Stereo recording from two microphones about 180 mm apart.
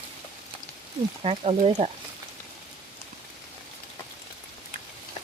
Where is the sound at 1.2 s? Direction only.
35° right (ahead or behind).